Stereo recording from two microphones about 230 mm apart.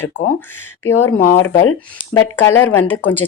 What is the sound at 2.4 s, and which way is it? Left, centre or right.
Speech, centre.